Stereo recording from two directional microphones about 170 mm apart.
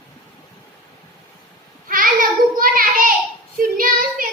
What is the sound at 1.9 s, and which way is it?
Child singing, 55° right (ahead or behind).